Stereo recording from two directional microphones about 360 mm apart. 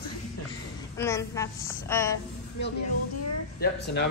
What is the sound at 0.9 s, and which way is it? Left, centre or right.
A woman's voice, centre.